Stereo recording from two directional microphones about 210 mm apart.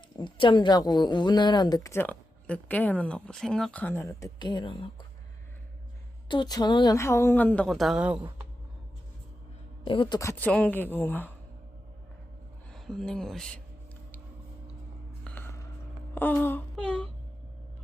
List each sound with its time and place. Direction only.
0.2 s speech: 25° left (ahead or behind)
6.2 s a woman's voice: 20° left (ahead or behind); by 8.2 s 5° right (ahead or behind)
9.8 s a woman's voice: 25° left (ahead or behind); by 11.3 s 10° left (ahead or behind)
12.7 s speech: centre (ahead or behind)
15.2 s a sound: 10° left (ahead or behind)
16.1 s wail: 10° left (ahead or behind)